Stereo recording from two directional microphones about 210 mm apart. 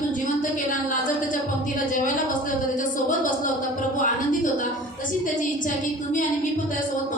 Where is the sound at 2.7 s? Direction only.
40° left (ahead or behind).